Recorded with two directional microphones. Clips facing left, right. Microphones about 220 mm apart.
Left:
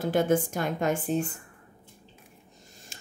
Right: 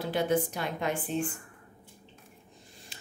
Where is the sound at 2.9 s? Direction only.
45° left (ahead or behind).